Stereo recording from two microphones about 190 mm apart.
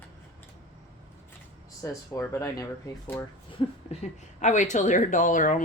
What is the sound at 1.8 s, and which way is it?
Speech, 15° left (ahead or behind).